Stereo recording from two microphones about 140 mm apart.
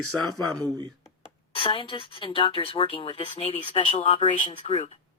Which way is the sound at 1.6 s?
40° left (ahead or behind).